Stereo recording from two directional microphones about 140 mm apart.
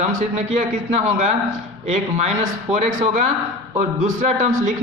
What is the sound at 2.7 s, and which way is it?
Speech, 65° right (ahead or behind).